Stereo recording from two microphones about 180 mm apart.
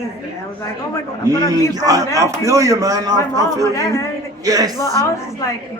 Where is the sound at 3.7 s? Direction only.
15° left (ahead or behind).